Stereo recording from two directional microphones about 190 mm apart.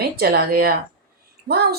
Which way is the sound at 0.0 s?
55° right (ahead or behind).